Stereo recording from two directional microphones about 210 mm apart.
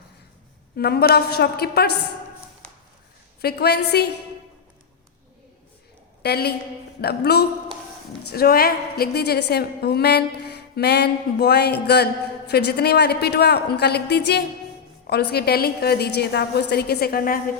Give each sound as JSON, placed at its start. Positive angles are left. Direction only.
{"t": 0.8, "sound": "speech", "side_deg": 50}
{"t": 3.4, "sound": "speech", "side_deg": 50}
{"t": 6.2, "sound": "speech", "side_deg": 50}